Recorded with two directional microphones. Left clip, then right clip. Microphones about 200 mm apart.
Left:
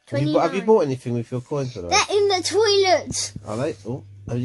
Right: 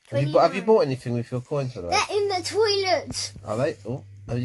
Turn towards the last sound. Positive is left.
turn(degrees=5)  # may be behind; listen again after turning